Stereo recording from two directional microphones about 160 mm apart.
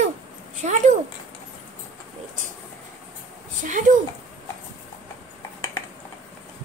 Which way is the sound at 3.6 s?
55° right (ahead or behind).